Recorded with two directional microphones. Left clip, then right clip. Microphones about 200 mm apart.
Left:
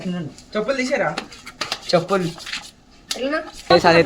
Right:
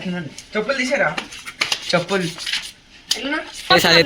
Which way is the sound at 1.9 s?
45° left (ahead or behind).